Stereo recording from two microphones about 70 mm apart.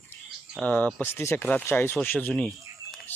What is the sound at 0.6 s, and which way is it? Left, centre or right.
Speech, left.